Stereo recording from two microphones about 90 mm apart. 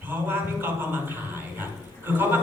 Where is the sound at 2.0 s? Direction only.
20° right (ahead or behind).